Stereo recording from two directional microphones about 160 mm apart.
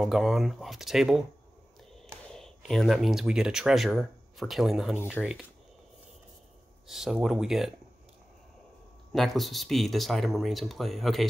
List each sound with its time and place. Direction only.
0.0 s speech: centre (ahead or behind)
2.3 s speech: centre (ahead or behind)
6.9 s speech: centre (ahead or behind)
9.1 s speech: centre (ahead or behind)